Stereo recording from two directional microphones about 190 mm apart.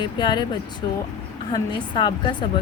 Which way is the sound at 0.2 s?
25° left (ahead or behind).